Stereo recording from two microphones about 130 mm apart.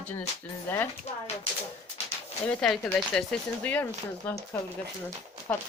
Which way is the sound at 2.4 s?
5° left (ahead or behind).